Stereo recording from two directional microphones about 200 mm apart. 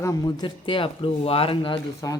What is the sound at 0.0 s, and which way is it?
Speech, 15° left (ahead or behind).